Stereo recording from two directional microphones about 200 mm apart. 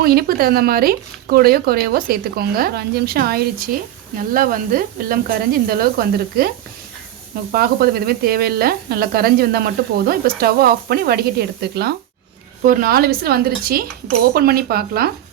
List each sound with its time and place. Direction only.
0.0 s speech: 50° right (ahead or behind)
7.5 s speech: 50° right (ahead or behind)